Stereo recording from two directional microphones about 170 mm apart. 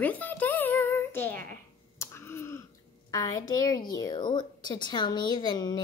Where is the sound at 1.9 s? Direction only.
15° left (ahead or behind).